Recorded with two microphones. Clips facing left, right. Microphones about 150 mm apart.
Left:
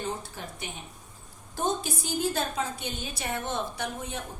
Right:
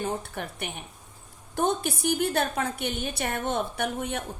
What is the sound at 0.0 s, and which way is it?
A woman's voice, 60° right (ahead or behind).